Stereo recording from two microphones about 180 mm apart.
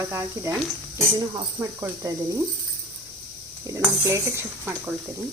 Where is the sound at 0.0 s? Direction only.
15° right (ahead or behind).